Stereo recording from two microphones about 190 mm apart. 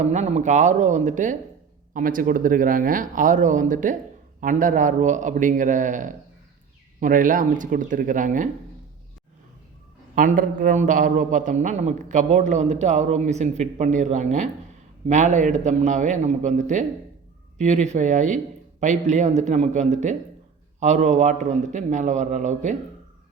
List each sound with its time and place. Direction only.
0.0 s a man's voice: 35° right (ahead or behind)
10.2 s a man's voice: 45° right (ahead or behind)